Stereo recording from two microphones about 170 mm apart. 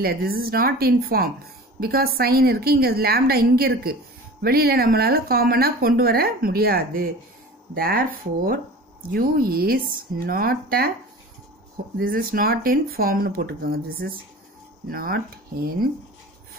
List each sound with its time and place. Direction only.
0.0 s speech: 65° right (ahead or behind)
12.0 s speech: 60° right (ahead or behind)